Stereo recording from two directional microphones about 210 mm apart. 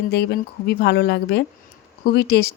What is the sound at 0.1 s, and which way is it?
Speech, 50° left (ahead or behind).